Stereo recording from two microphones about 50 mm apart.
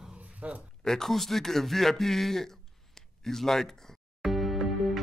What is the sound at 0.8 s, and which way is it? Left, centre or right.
Speech, centre.